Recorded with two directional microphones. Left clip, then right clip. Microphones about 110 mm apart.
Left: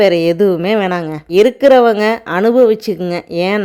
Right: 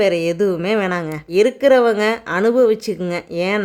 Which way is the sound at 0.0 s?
35° left (ahead or behind).